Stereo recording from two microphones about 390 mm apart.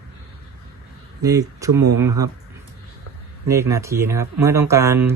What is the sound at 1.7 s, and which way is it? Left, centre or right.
Speech, right.